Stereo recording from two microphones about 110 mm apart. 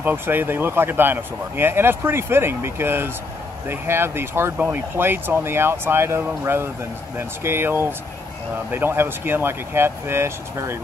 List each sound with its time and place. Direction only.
0.0 s speech: 20° right (ahead or behind)